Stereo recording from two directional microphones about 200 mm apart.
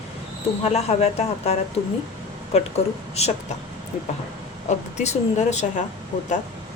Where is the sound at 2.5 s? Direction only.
30° left (ahead or behind).